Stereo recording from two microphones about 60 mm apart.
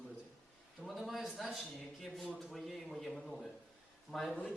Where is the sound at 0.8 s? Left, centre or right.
Centre.